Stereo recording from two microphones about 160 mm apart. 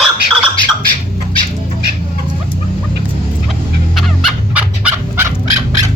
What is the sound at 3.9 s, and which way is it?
Fowl, centre (ahead or behind).